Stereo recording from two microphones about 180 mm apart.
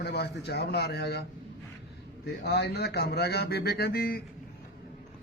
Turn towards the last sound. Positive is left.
turn(degrees=55)  # may be behind; listen again after turning